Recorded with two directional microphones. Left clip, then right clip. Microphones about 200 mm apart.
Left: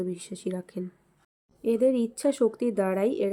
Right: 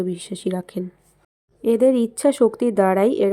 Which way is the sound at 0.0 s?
20° right (ahead or behind).